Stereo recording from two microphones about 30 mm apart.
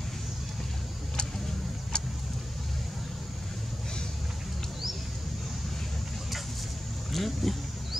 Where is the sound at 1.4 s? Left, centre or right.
Left.